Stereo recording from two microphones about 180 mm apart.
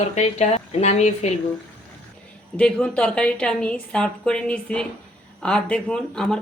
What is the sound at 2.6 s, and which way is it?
A woman's voice, 5° left (ahead or behind).